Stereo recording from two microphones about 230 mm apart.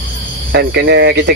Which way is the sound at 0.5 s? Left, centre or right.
Right.